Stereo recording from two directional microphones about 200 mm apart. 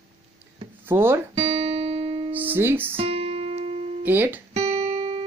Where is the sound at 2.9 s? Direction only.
30° right (ahead or behind).